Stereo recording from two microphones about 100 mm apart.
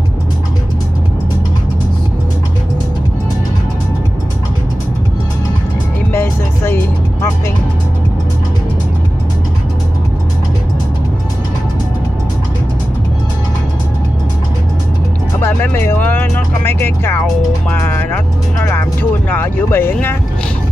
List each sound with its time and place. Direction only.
6.1 s music: 25° left (ahead or behind)
15.4 s vehicle: 20° left (ahead or behind)